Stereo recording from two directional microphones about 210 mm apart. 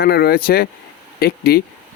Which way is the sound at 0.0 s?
50° left (ahead or behind).